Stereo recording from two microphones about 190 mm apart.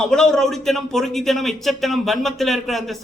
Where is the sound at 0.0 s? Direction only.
5° left (ahead or behind).